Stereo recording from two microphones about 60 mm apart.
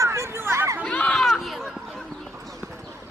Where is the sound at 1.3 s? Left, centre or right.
Centre.